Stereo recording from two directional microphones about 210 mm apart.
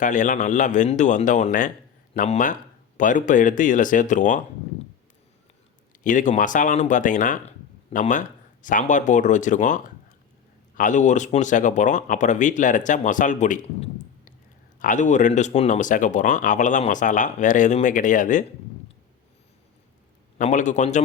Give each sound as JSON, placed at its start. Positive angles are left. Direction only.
{"t": 0.0, "sound": "speech", "side_deg": 35}
{"t": 6.0, "sound": "speech", "side_deg": 40}
{"t": 20.4, "sound": "speech", "side_deg": 35}